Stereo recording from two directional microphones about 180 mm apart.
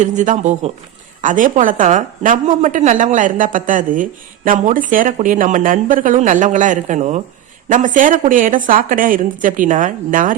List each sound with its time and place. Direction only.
0.0 s speech: 45° right (ahead or behind)